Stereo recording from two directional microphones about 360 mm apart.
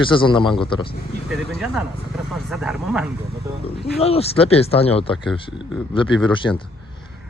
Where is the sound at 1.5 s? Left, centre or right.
Centre.